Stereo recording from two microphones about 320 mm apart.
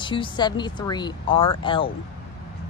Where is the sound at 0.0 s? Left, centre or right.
Centre.